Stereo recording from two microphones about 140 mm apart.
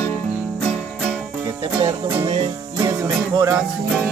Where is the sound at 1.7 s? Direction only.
20° right (ahead or behind).